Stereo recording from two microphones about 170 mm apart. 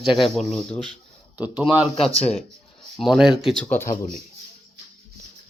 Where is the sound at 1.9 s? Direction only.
35° left (ahead or behind).